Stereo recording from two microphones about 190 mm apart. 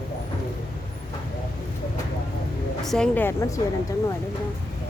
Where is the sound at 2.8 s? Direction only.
5° left (ahead or behind).